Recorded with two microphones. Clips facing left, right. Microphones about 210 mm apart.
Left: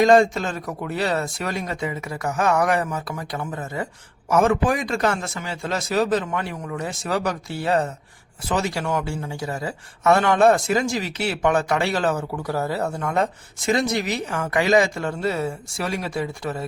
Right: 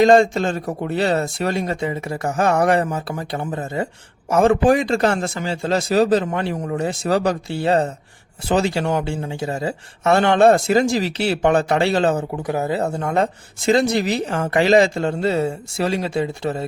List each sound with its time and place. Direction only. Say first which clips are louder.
0.0 s speech: right 3 dB; 30° right (ahead or behind)